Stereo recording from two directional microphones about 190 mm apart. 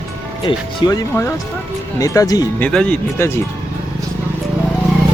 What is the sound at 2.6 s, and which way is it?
Speech, 5° left (ahead or behind).